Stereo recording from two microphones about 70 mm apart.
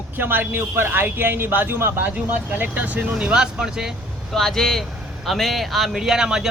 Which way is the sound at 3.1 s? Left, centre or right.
Centre.